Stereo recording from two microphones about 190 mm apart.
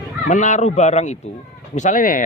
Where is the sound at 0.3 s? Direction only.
40° left (ahead or behind).